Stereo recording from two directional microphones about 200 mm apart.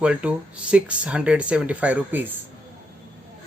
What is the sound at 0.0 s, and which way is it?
Speech, 5° right (ahead or behind).